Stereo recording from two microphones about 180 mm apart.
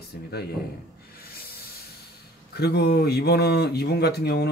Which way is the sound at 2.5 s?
65° left (ahead or behind).